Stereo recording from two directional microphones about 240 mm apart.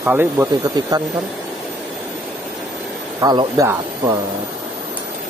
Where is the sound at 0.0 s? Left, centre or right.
Centre.